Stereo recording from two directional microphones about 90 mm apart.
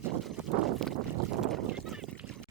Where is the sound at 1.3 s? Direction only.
Centre (ahead or behind).